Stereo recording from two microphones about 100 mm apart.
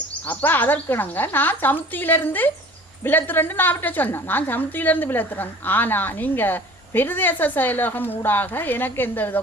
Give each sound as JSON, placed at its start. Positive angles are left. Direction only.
{"t": 0.3, "sound": "a woman's voice", "side_deg": 20}